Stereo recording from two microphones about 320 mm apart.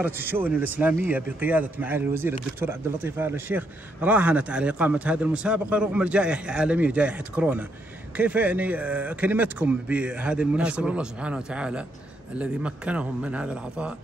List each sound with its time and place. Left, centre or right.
0.0 s a man's voice: centre